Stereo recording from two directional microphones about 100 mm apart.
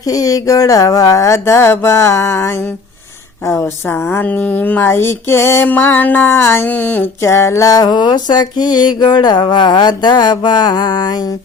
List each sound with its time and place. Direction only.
0.0 s speech: 35° left (ahead or behind)